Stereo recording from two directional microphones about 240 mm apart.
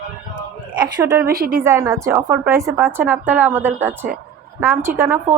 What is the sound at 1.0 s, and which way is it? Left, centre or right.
Speech, centre.